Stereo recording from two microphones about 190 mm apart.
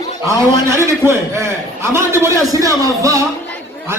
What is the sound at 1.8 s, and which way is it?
Speech, 15° right (ahead or behind).